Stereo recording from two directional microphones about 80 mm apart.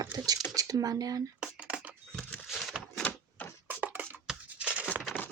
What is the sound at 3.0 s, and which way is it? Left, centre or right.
Typewriter, left.